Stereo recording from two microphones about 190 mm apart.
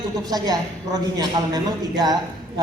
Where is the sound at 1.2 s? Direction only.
20° right (ahead or behind).